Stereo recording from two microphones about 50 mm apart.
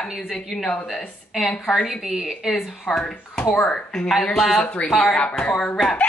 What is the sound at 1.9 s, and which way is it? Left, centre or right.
Speech, centre.